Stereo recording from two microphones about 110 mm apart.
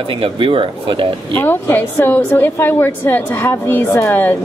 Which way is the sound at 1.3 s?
15° left (ahead or behind).